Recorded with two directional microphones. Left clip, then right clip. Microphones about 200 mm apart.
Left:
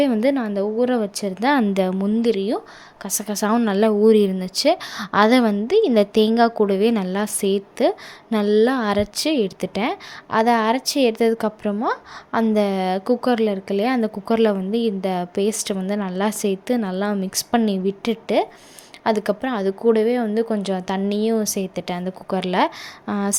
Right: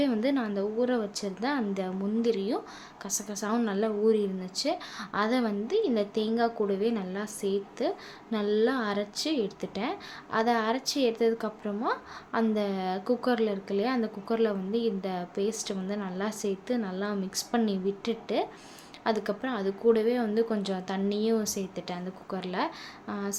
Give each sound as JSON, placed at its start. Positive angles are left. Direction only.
{"t": 0.0, "sound": "a woman's voice", "side_deg": 35}